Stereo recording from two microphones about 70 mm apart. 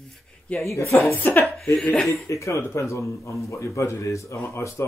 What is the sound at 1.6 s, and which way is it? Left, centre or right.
Speech, centre.